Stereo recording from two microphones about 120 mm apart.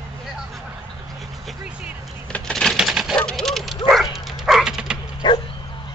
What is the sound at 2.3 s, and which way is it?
Typewriter, 5° left (ahead or behind).